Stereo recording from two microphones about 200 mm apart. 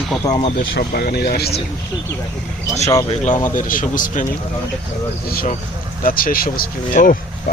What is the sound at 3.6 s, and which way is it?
Speech, 40° left (ahead or behind).